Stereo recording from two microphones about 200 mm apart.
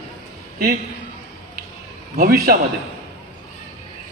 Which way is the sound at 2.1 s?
50° right (ahead or behind).